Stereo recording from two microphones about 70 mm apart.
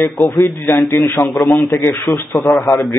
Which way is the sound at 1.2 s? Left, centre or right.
Left.